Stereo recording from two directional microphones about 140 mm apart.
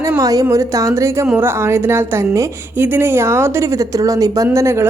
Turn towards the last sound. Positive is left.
turn(degrees=-20)  # may be behind; listen again after turning